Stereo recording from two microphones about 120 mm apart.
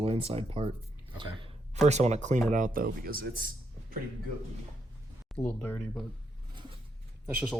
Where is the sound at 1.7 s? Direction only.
70° right (ahead or behind).